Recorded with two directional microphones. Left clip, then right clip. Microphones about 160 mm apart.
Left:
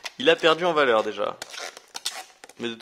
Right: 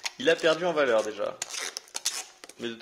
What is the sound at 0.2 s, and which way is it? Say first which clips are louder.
Speech: left 4 dB; 40° left (ahead or behind).